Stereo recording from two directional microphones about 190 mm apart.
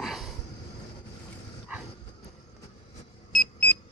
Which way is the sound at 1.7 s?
5° right (ahead or behind).